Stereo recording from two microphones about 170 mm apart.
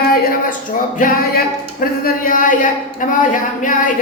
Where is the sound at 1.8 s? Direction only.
55° left (ahead or behind).